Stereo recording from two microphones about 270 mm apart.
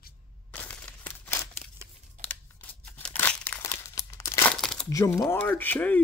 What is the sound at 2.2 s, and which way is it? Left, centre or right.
Tearing, centre.